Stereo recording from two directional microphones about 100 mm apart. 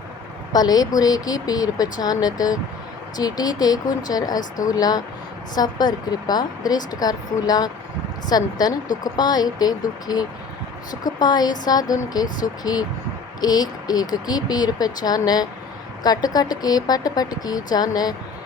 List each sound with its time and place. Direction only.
0.5 s speech: 40° left (ahead or behind)